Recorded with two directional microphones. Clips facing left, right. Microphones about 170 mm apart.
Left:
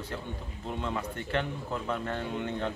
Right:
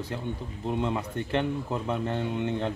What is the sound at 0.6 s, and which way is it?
A man's voice, 25° right (ahead or behind).